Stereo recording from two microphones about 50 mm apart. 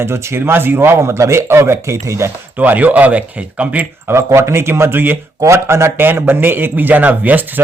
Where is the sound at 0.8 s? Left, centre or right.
Right.